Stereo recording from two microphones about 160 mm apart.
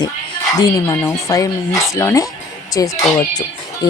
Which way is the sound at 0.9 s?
20° left (ahead or behind).